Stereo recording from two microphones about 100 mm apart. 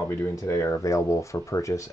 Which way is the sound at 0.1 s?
25° left (ahead or behind).